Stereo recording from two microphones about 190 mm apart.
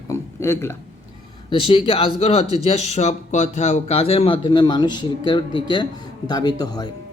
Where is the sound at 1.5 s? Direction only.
25° left (ahead or behind).